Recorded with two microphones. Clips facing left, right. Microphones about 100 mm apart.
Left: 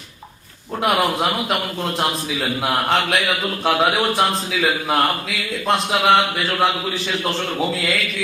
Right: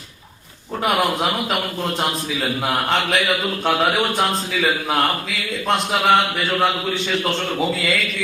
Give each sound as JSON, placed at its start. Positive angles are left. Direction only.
{"t": 1.2, "sound": "a man's voice", "side_deg": 0}
{"t": 2.4, "sound": "a man's voice", "side_deg": 15}
{"t": 2.9, "sound": "a man's voice", "side_deg": 0}